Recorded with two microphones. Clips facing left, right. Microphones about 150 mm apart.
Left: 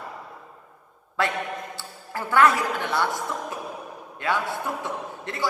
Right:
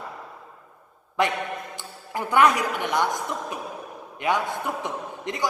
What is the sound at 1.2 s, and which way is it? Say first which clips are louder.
A man's voice: right 2 dB; 20° right (ahead or behind).